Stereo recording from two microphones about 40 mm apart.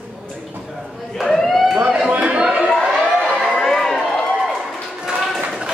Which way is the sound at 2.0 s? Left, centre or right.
Right.